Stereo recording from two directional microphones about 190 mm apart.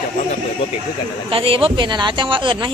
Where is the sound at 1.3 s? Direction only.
30° right (ahead or behind).